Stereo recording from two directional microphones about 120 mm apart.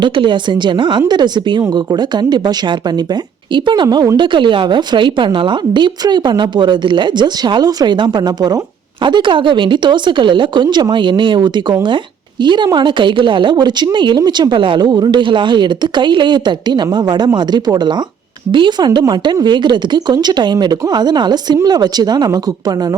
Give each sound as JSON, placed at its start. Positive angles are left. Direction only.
{"t": 0.0, "sound": "a woman's voice", "side_deg": -40}
{"t": 3.5, "sound": "a woman's voice", "side_deg": -40}
{"t": 4.2, "sound": "a woman's voice", "side_deg": -40}